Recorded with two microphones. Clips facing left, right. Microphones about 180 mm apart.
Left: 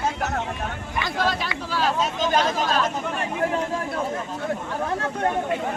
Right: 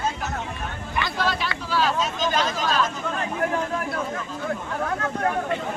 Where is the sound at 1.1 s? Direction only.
45° left (ahead or behind).